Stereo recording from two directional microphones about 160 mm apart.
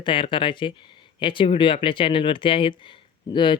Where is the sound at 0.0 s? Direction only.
30° left (ahead or behind).